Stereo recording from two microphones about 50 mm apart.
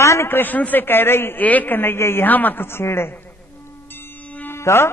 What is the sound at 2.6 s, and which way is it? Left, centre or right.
Speech, left.